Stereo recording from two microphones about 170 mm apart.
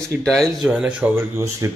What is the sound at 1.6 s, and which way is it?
Speech, 20° right (ahead or behind).